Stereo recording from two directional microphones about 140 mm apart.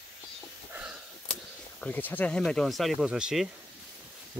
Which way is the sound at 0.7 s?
5° right (ahead or behind).